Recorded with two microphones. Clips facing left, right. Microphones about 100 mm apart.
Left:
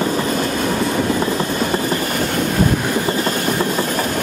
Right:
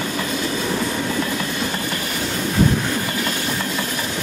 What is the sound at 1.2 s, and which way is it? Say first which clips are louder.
Vehicle: left 5 dB; 35° left (ahead or behind).